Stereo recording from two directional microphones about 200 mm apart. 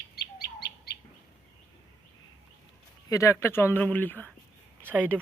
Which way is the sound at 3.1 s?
15° left (ahead or behind).